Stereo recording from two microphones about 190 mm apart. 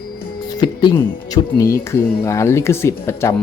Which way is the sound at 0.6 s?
25° left (ahead or behind).